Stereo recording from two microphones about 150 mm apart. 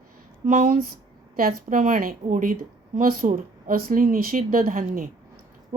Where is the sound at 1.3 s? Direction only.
75° right (ahead or behind).